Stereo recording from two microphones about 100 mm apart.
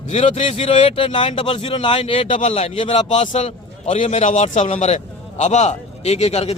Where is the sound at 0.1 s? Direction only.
85° left.